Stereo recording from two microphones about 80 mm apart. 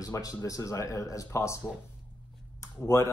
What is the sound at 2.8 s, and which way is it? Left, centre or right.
Speech, left.